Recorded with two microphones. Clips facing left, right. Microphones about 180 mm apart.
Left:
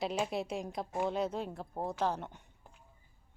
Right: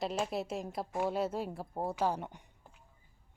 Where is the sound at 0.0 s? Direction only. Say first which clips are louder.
Even; centre (ahead or behind).